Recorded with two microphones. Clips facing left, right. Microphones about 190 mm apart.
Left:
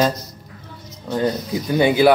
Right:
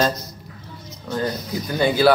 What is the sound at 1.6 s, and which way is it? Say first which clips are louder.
Speech: left 3 dB; 15° left (ahead or behind).